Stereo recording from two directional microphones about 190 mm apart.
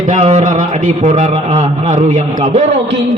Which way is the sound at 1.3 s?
25° right (ahead or behind).